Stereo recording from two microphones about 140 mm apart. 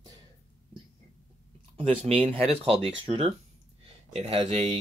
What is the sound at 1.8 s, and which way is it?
Speech, 40° right (ahead or behind).